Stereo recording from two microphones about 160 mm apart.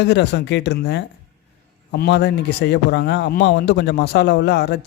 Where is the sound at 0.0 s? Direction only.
90° left.